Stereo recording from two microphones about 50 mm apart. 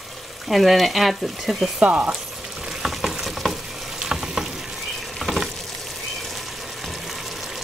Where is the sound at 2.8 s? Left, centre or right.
Centre.